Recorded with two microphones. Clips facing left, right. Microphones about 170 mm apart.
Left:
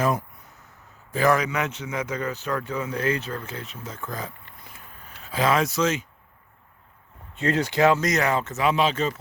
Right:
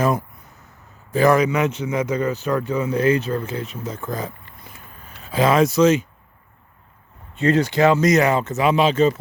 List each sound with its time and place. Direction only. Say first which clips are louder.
1.1 s a man's voice: right 6 dB; 25° right (ahead or behind)
7.3 s speech: right 5 dB; 5° left (ahead or behind)
7.9 s speech: right 7 dB; 5° right (ahead or behind)